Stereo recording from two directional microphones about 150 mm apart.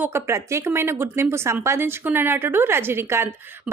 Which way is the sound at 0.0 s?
15° right (ahead or behind).